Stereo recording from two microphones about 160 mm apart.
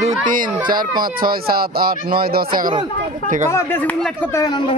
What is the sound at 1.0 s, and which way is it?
Speech, 65° right (ahead or behind).